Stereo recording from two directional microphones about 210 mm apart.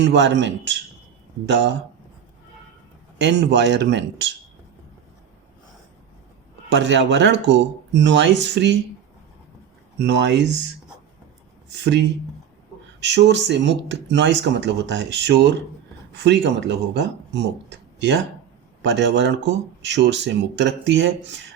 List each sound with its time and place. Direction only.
0.0 s speech: 60° right (ahead or behind)
3.2 s speech: 55° right (ahead or behind)
6.7 s speech: 60° right (ahead or behind)
10.0 s speech: 55° right (ahead or behind)
11.7 s speech: 55° right (ahead or behind)